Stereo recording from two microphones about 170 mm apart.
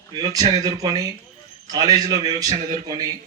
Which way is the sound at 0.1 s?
25° right (ahead or behind).